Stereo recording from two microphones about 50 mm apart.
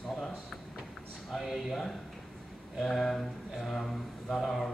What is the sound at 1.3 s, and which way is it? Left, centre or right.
Speech, centre.